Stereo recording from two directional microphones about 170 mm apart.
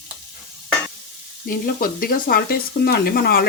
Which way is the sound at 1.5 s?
55° left (ahead or behind).